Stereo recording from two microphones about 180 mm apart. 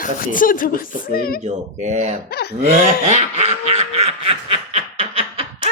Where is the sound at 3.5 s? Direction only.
35° right (ahead or behind).